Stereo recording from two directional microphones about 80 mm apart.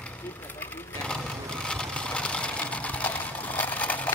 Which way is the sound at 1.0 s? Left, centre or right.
Centre.